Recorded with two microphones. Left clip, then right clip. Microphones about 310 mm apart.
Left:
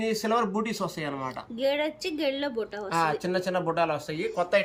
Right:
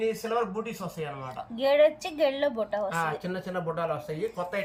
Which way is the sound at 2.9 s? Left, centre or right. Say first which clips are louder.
Left 4 dB; left.